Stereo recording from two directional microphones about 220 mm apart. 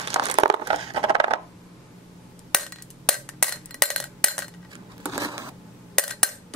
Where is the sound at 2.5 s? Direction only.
Centre (ahead or behind).